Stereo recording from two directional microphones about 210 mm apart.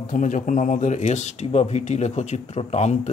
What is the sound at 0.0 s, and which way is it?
Speech, 40° left (ahead or behind).